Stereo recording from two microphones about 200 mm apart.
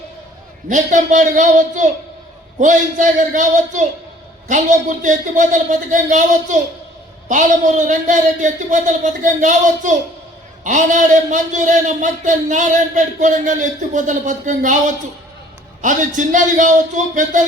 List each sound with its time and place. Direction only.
0.7 s a man's voice: 40° right (ahead or behind)